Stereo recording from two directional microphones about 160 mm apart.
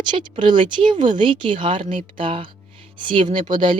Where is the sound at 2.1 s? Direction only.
30° right (ahead or behind).